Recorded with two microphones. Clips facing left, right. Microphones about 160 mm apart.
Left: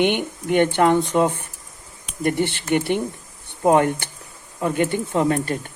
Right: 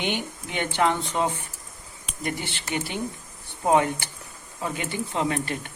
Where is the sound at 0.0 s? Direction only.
60° left (ahead or behind).